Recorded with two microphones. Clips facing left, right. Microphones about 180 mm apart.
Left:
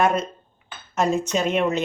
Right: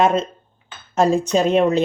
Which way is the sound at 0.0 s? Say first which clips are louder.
Right 4 dB; 25° right (ahead or behind).